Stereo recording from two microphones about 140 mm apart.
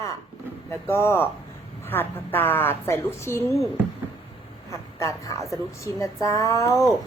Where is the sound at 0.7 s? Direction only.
15° left (ahead or behind).